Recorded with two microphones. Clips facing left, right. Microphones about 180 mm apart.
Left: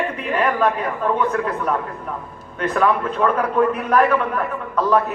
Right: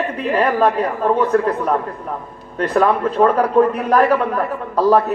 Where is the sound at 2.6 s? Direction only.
35° right (ahead or behind).